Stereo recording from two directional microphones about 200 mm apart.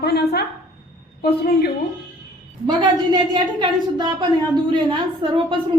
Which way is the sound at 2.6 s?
20° right (ahead or behind).